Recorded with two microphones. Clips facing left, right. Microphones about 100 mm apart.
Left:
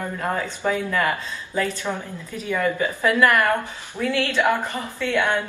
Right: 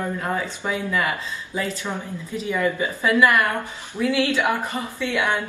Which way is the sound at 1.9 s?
Centre (ahead or behind).